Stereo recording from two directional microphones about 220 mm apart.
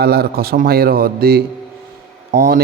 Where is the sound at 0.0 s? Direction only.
45° right (ahead or behind).